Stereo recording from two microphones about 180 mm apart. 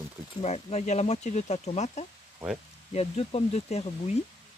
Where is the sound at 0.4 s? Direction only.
40° left (ahead or behind).